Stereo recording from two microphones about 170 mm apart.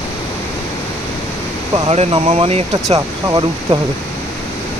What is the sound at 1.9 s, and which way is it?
Speech, 35° right (ahead or behind).